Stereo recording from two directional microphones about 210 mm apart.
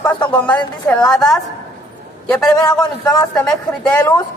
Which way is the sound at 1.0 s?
15° left (ahead or behind).